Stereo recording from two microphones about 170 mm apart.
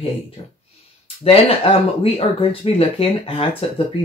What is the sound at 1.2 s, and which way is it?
Speech, 35° left (ahead or behind).